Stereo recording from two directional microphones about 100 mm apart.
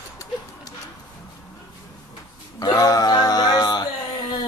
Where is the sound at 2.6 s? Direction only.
40° left (ahead or behind).